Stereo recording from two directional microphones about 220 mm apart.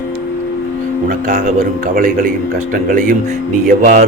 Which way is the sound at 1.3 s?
35° right (ahead or behind).